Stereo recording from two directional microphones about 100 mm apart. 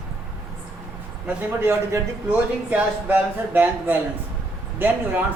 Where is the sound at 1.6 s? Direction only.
20° right (ahead or behind).